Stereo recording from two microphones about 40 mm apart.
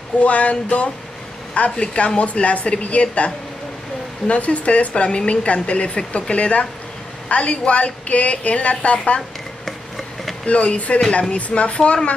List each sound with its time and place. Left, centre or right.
0.2 s a woman's voice: left
4.3 s a woman's voice: left
9.7 s a sound: centre
10.4 s speech: left